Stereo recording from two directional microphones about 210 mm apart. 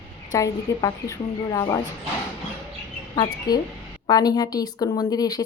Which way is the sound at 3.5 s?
20° left (ahead or behind).